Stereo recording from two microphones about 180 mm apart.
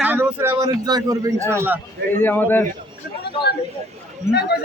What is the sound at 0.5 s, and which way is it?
A man's voice, 20° right (ahead or behind).